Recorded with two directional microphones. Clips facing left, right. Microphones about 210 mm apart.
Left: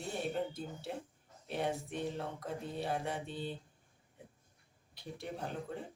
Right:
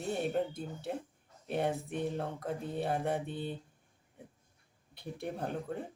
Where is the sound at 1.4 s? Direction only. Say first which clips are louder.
Right 4 dB; 55° right (ahead or behind).